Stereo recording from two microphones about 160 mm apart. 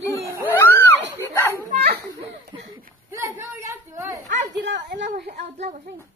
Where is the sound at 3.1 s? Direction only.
15° right (ahead or behind).